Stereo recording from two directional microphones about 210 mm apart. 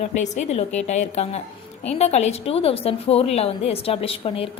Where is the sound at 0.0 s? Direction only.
35° left (ahead or behind).